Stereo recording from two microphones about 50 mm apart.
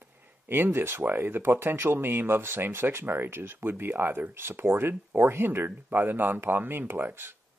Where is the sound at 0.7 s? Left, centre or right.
Right.